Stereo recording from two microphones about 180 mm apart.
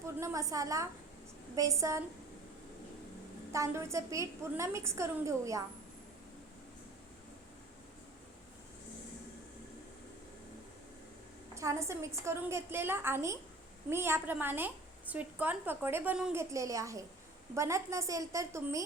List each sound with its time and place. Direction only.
0.0 s a woman's voice: 15° right (ahead or behind)
3.5 s a woman's voice: 15° right (ahead or behind)
11.5 s a woman's voice: 15° right (ahead or behind)